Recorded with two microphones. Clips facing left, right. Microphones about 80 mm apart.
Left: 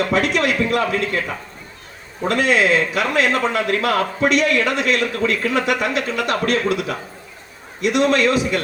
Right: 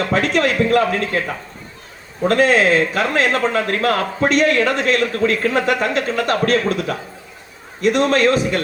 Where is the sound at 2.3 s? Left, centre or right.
Right.